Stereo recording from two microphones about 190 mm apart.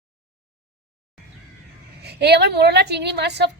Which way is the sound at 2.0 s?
60° right (ahead or behind).